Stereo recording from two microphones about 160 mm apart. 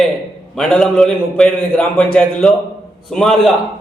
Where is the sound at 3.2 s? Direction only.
Centre (ahead or behind).